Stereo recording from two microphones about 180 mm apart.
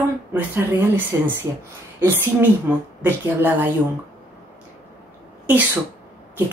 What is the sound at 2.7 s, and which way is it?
Speech, 10° right (ahead or behind).